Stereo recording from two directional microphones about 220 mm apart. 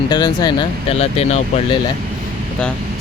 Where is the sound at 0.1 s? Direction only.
20° left (ahead or behind).